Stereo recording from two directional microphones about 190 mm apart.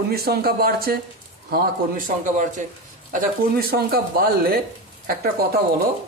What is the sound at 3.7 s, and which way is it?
Speech, 55° right (ahead or behind).